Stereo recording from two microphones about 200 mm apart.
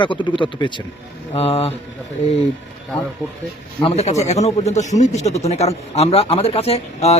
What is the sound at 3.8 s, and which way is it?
Speech, 35° left (ahead or behind).